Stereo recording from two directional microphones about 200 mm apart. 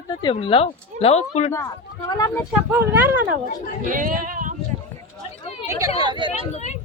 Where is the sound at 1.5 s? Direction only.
15° left (ahead or behind).